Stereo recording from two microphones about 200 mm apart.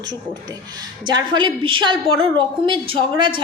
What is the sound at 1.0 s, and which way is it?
A woman's voice, 20° right (ahead or behind).